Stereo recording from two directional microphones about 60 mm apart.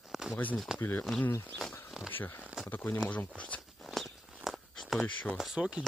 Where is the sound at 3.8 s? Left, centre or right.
Centre.